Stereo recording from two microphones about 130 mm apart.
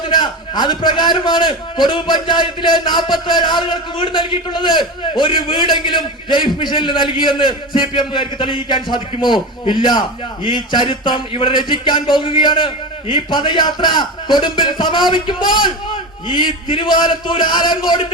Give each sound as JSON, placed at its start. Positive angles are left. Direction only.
{"t": 0.0, "sound": "a man's voice", "side_deg": 35}